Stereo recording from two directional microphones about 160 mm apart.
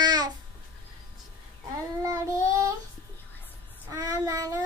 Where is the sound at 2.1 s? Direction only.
20° right (ahead or behind).